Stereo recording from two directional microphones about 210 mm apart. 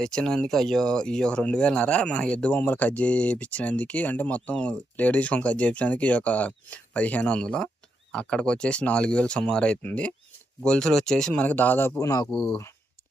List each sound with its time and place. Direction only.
0.0 s speech: 5° left (ahead or behind)